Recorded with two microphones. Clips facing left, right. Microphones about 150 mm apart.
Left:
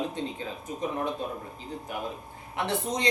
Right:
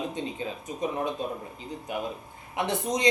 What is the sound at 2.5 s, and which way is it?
Speech, 15° right (ahead or behind).